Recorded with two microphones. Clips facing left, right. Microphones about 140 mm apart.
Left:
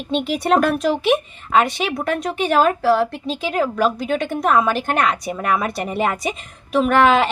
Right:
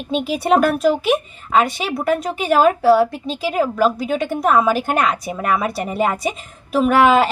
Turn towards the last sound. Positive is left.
turn(degrees=-5)  # may be behind; listen again after turning